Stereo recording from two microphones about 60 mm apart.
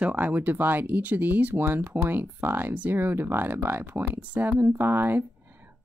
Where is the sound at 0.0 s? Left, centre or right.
Right.